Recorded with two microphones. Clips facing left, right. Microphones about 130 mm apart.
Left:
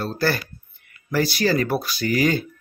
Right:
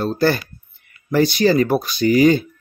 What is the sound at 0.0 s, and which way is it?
Speech, 20° right (ahead or behind).